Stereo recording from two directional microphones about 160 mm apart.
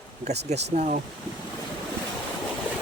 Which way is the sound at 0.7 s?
50° right (ahead or behind).